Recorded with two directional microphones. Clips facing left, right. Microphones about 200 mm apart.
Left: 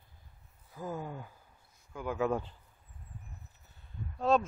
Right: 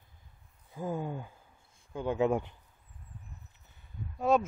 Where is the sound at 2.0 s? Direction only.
25° right (ahead or behind).